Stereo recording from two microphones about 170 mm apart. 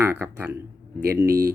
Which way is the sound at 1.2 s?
65° right (ahead or behind).